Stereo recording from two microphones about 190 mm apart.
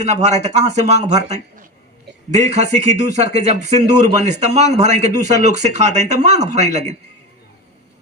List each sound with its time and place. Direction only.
0.0 s speech: 35° right (ahead or behind)